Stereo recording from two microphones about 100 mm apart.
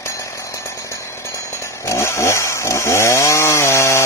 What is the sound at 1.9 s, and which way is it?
Chainsaw, 30° left (ahead or behind).